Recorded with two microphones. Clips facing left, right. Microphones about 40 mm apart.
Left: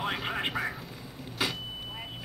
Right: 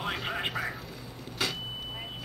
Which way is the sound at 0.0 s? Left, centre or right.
Centre.